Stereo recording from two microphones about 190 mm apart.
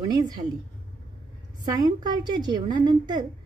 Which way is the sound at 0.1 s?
20° right (ahead or behind).